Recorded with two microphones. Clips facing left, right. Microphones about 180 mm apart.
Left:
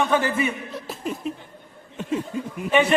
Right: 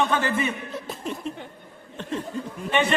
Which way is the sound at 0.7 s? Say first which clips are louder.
Left 1 dB; centre (ahead or behind).